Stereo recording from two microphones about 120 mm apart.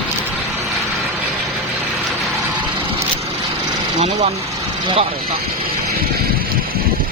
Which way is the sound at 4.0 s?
65° right (ahead or behind).